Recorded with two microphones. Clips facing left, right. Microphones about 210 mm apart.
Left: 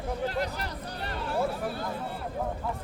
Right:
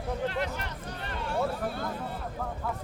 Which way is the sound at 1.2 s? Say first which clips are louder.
Even; centre (ahead or behind).